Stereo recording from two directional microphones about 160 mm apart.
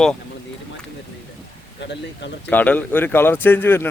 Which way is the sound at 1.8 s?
90° left.